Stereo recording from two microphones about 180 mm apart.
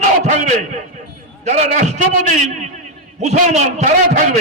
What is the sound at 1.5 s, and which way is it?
A man's voice, 40° right (ahead or behind).